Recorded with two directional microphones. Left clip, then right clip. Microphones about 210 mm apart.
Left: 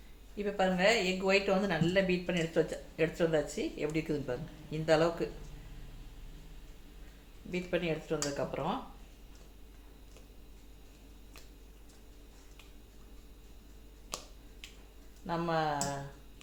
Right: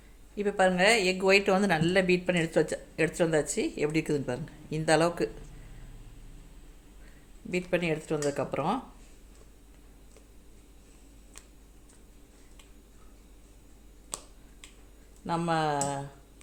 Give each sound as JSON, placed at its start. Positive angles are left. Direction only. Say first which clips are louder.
{"t": 0.3, "sound": "speech", "louder": "right 6 dB", "side_deg": -45}
{"t": 7.5, "sound": "speech", "louder": "right 5 dB", "side_deg": -55}
{"t": 15.3, "sound": "speech", "louder": "right 4 dB", "side_deg": -60}